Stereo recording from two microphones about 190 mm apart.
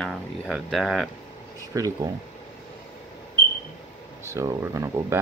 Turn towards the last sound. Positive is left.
turn(degrees=-15)  # may be behind; listen again after turning